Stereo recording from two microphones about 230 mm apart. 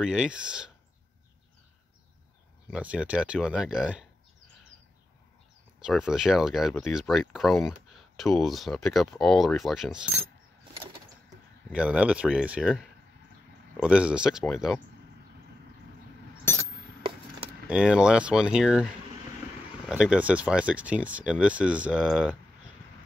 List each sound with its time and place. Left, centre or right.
0.0 s speech: centre
2.7 s speech: centre
5.8 s speech: centre
11.7 s speech: centre
17.0 s wood: right
17.6 s speech: centre
19.9 s speech: centre